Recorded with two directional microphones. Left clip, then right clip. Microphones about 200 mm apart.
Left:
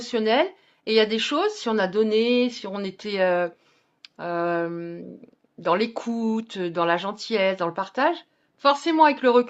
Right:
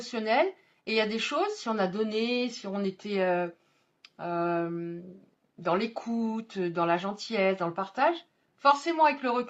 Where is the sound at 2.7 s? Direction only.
50° left (ahead or behind).